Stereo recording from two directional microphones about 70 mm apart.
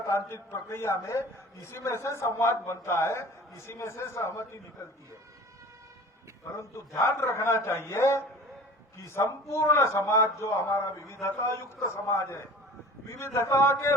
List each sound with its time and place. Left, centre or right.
0.0 s a man's voice: left
6.6 s a man's voice: left